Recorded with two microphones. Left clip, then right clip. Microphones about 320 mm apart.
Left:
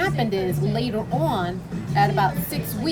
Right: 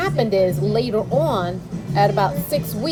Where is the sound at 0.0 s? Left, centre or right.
Centre.